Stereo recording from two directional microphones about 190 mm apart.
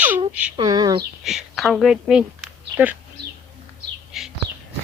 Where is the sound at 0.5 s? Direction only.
20° right (ahead or behind).